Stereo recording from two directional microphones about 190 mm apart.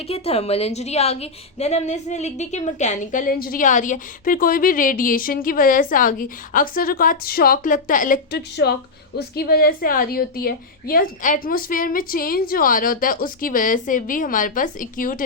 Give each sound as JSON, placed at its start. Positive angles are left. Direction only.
{"t": 0.1, "sound": "a woman's voice", "side_deg": 30}